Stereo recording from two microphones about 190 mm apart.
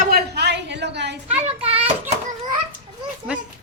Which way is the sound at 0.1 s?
65° right (ahead or behind).